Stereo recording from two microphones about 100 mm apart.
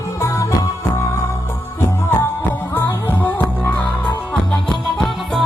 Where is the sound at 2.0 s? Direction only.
20° left (ahead or behind).